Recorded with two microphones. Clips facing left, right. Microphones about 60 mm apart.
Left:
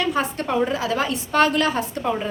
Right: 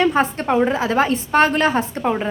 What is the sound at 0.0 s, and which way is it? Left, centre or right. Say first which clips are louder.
A woman's voice: right 5 dB; right.